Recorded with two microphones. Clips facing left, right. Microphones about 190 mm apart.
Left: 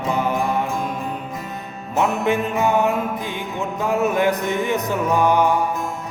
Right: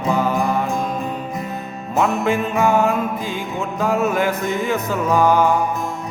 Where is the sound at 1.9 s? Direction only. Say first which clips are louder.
Right 1 dB; 20° left (ahead or behind).